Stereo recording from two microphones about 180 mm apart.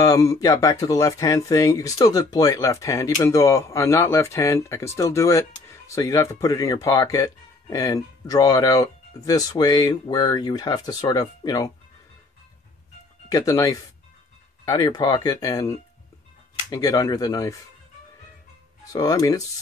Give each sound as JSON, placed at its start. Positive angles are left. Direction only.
{"t": 0.0, "sound": "speech", "side_deg": 20}
{"t": 13.3, "sound": "speech", "side_deg": 20}
{"t": 18.9, "sound": "speech", "side_deg": 20}